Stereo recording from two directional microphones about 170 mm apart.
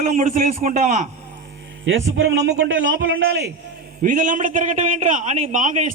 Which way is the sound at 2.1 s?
90° right.